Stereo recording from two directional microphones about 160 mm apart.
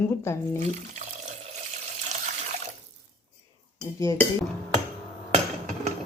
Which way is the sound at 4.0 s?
20° left (ahead or behind).